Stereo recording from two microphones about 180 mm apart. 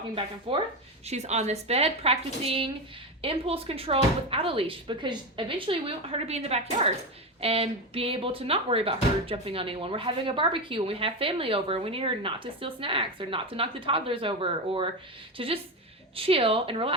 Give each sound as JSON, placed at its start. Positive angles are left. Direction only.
{"t": 0.5, "sound": "speech", "side_deg": -35}